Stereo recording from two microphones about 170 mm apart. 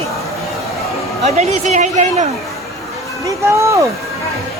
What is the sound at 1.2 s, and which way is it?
A woman's voice, 45° right (ahead or behind).